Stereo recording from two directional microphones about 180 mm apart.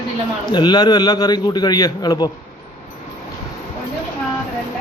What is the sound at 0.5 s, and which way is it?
A man's voice, 25° left (ahead or behind).